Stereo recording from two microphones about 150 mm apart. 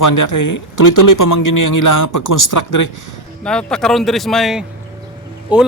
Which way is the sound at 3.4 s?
5° left (ahead or behind).